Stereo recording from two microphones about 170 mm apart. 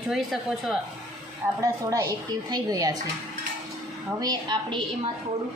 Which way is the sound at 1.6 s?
20° right (ahead or behind).